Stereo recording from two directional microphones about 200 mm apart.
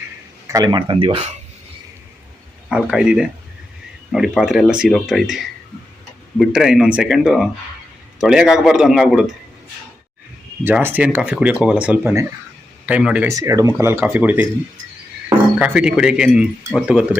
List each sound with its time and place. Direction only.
0.4 s speech: 20° right (ahead or behind)
2.6 s speech: 5° right (ahead or behind)
10.6 s speech: 10° right (ahead or behind)
15.5 s speech: 5° right (ahead or behind)